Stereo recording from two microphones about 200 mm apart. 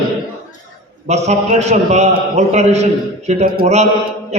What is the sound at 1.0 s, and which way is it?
A man's voice, 35° right (ahead or behind).